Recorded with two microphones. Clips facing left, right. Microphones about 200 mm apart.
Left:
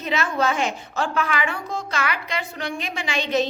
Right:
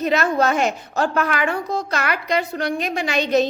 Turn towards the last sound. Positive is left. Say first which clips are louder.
# right 5 dB
turn(degrees=-40)  # may be behind; listen again after turning